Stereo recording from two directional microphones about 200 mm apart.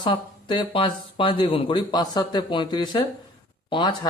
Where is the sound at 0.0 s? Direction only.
20° left (ahead or behind).